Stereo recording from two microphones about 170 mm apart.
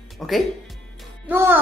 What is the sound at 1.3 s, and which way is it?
Speech, 15° right (ahead or behind).